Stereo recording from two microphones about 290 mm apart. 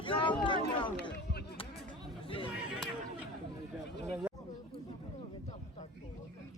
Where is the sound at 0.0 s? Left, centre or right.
Centre.